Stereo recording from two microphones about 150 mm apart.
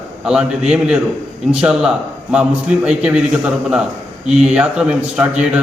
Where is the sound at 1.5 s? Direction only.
5° right (ahead or behind).